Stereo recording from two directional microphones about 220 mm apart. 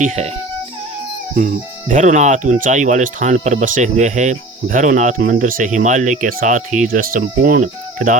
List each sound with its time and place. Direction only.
0.0 s speech: 30° right (ahead or behind)
1.4 s speech: 35° right (ahead or behind)